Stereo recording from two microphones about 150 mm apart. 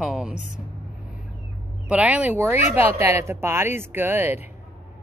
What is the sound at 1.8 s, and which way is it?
Speech, 10° right (ahead or behind).